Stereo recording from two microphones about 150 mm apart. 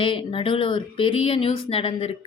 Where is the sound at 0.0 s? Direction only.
35° left (ahead or behind).